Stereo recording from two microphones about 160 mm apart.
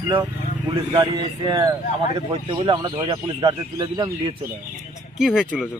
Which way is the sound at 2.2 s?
30° right (ahead or behind).